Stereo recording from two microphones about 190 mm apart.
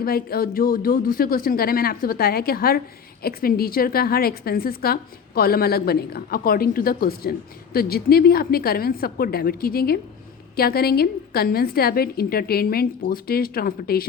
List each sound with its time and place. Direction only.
0.0 s a woman's voice: 55° left (ahead or behind)